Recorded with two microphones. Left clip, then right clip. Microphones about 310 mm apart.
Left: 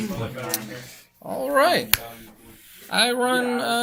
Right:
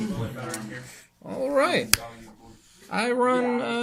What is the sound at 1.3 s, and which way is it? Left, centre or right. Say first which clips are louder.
Speech: left 4 dB; centre.